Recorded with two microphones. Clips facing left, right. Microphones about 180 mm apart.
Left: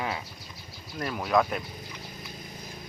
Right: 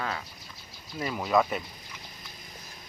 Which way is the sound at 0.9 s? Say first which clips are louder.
Even; centre (ahead or behind).